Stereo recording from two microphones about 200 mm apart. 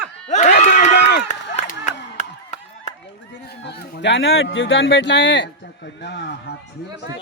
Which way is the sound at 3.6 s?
60° left (ahead or behind).